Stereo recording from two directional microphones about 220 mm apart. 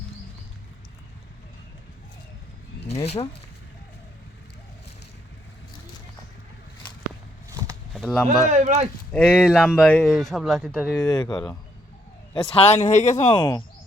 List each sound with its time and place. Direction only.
2.8 s speech: 30° left (ahead or behind)
7.9 s speech: 5° left (ahead or behind)
8.4 s speech: 35° right (ahead or behind)
9.1 s speech: centre (ahead or behind); by 11.5 s 15° left (ahead or behind)
12.3 s speech: 25° left (ahead or behind)